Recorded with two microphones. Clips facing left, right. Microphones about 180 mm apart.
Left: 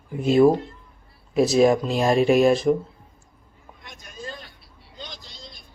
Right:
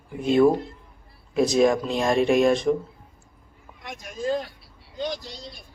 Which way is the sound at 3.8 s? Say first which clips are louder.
Right 10 dB; 85° right.